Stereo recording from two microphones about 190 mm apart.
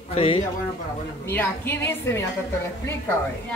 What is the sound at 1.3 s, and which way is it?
Speech, 15° left (ahead or behind).